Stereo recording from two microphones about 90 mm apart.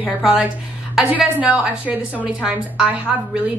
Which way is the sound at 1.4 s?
15° right (ahead or behind).